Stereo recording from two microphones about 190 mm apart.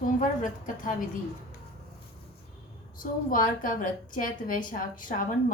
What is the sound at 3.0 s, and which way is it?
A woman's voice, 45° left (ahead or behind).